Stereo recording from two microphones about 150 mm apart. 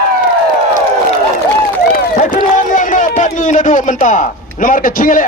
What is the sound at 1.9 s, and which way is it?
Run, 65° left (ahead or behind).